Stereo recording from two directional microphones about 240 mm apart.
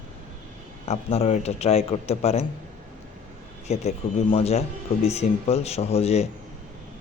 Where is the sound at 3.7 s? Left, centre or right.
Left.